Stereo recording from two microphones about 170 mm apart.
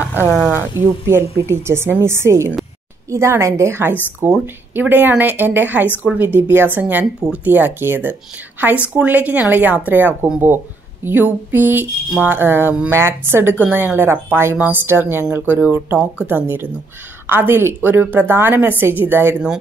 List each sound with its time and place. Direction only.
0.5 s speech: 15° right (ahead or behind)